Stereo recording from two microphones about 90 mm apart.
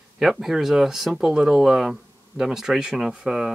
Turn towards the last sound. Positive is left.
turn(degrees=-5)  # may be behind; listen again after turning